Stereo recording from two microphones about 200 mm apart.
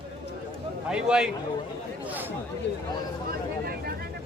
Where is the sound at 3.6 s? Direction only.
50° right (ahead or behind).